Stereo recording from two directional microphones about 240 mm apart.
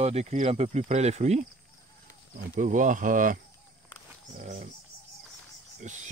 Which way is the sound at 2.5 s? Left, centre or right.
Right.